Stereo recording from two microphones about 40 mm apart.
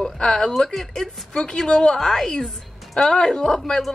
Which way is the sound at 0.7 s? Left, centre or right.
Centre.